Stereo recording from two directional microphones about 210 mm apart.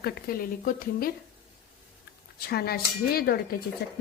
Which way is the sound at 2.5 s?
45° left (ahead or behind).